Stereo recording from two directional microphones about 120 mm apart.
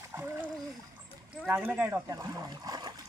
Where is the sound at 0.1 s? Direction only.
20° right (ahead or behind).